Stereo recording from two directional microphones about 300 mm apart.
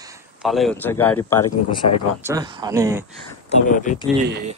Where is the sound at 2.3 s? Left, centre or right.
Centre.